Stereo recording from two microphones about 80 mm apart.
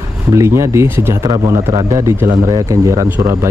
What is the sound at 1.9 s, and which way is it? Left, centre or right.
Speech, right.